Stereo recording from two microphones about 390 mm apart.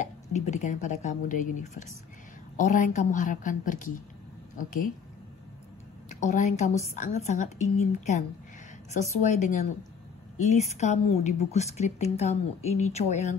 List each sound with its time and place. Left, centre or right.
0.0 s a woman's voice: centre
6.0 s a woman's voice: centre